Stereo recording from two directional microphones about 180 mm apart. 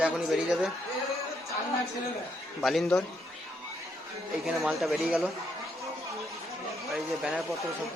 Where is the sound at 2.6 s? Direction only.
Centre (ahead or behind).